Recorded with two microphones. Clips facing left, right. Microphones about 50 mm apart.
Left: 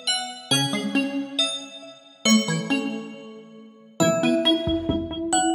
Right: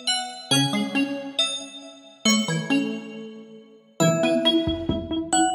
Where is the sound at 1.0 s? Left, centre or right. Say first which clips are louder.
Left 2 dB; centre.